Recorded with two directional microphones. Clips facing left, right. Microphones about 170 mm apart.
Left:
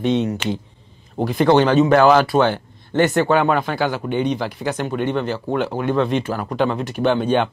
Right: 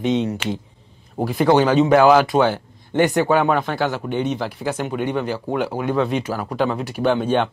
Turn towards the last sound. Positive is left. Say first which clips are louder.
# left 1 dB
turn(degrees=0)  # may be behind; listen again after turning